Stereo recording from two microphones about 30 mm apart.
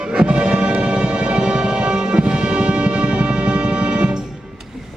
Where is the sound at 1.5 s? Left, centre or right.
Right.